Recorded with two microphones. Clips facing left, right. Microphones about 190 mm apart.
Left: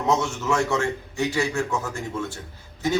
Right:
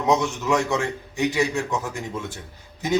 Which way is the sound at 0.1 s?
15° right (ahead or behind).